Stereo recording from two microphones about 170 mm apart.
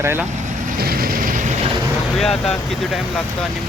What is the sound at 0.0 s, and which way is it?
Speech, 15° right (ahead or behind).